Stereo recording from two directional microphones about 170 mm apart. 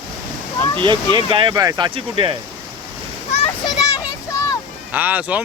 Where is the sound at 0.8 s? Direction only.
30° right (ahead or behind).